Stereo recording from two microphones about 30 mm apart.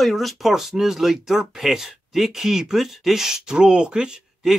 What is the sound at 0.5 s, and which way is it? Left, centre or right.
Speech, centre.